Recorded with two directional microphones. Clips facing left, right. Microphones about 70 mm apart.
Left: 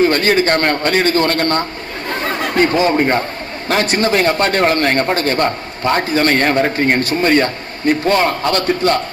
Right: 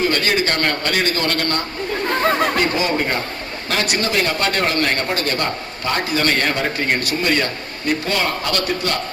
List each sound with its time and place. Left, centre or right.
0.0 s speech: left